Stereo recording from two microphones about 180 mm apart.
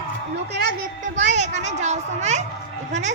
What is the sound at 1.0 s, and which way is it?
A woman's voice, 40° right (ahead or behind).